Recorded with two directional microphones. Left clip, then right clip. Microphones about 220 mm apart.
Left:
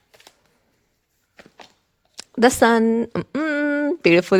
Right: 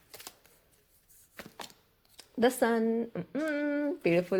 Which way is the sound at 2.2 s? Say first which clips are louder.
Left 12 dB; 50° left (ahead or behind).